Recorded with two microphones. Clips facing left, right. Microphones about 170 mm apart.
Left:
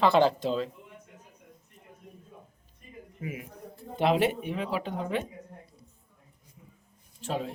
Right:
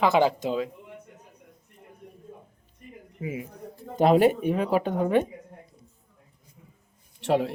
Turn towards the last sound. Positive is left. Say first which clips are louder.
# right 9 dB
turn(degrees=-75)  # may be behind; listen again after turning